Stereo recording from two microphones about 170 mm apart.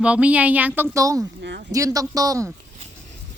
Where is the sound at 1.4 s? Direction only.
90° right.